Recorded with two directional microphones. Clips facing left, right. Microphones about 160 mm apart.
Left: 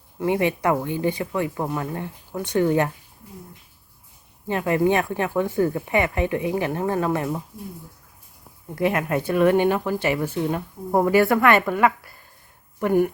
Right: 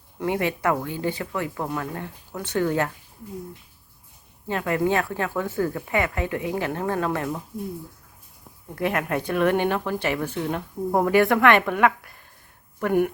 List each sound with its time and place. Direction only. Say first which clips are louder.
0.3 s speech: left 3 dB; 15° left (ahead or behind)
4.4 s speech: left 3 dB; 15° left (ahead or behind)
8.7 s speech: left 3 dB; 10° left (ahead or behind)